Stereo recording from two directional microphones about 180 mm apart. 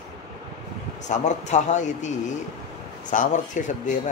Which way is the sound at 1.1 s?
40° left (ahead or behind).